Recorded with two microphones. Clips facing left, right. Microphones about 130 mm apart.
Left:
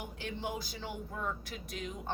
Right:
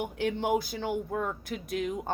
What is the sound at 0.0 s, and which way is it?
A woman's voice, 60° right (ahead or behind).